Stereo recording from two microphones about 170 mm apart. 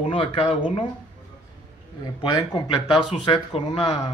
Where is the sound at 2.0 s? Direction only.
25° left (ahead or behind).